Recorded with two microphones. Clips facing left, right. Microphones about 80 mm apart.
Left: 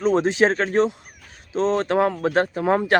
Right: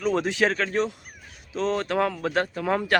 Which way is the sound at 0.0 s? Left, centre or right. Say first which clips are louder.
Left 5 dB; left.